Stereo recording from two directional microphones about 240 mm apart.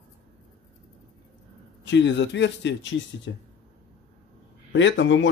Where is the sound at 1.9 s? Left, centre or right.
Left.